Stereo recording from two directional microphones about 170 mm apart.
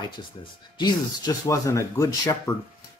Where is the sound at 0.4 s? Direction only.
25° left (ahead or behind).